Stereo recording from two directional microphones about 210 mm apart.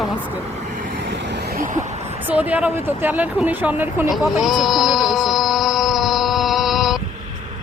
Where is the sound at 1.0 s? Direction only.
55° right (ahead or behind); by 2.0 s 35° right (ahead or behind).